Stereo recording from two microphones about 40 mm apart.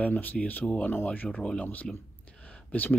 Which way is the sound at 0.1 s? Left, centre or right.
Left.